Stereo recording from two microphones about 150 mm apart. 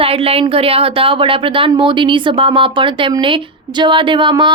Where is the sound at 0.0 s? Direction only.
40° right (ahead or behind).